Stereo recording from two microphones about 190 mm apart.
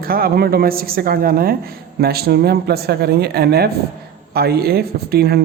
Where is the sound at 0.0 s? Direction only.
50° right (ahead or behind).